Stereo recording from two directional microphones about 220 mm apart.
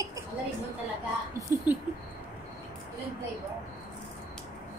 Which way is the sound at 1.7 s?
5° right (ahead or behind).